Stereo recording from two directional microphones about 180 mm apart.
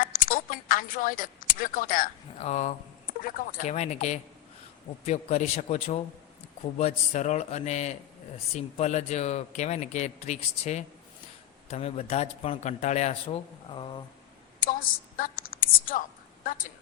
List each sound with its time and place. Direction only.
0.0 s a sound: 50° left (ahead or behind)
2.4 s speech: 40° left (ahead or behind)
14.6 s a woman's voice: 50° left (ahead or behind)